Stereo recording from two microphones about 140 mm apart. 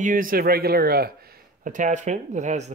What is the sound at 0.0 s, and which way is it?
Speech, 85° right.